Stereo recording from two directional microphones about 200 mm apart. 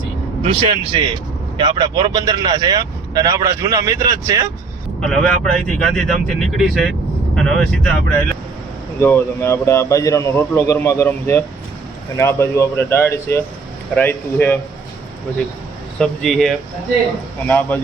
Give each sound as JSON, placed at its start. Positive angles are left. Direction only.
{"t": 0.4, "sound": "speech", "side_deg": -30}
{"t": 4.9, "sound": "a man's voice", "side_deg": 5}
{"t": 9.0, "sound": "speech", "side_deg": 10}
{"t": 16.0, "sound": "a man's voice", "side_deg": 0}